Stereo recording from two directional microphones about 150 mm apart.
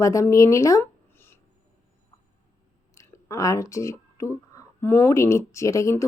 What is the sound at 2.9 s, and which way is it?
Speech, 20° left (ahead or behind).